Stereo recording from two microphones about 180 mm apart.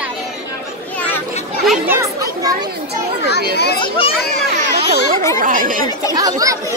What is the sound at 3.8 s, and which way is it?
Speech, 30° left (ahead or behind).